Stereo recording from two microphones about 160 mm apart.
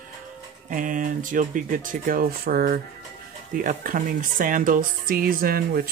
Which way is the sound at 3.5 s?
60° right (ahead or behind).